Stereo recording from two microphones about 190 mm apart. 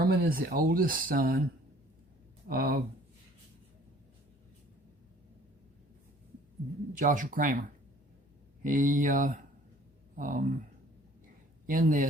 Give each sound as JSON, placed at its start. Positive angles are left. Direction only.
{"t": 0.0, "sound": "speech", "side_deg": -50}
{"t": 2.5, "sound": "speech", "side_deg": -50}
{"t": 6.9, "sound": "speech", "side_deg": -45}
{"t": 8.6, "sound": "speech", "side_deg": -45}
{"t": 11.6, "sound": "speech", "side_deg": -45}